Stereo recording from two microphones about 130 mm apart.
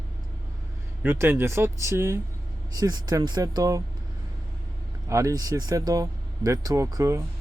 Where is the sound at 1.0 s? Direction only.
20° right (ahead or behind).